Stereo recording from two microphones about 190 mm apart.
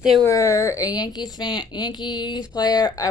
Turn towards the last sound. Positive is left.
turn(degrees=20)  # may be behind; listen again after turning